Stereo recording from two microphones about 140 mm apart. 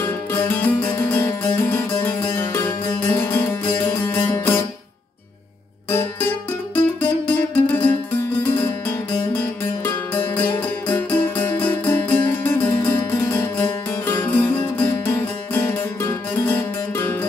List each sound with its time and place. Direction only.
0.0 s music: 15° left (ahead or behind)
5.9 s music: 15° left (ahead or behind)